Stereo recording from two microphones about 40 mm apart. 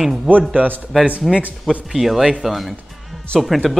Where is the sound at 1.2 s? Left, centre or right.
Centre.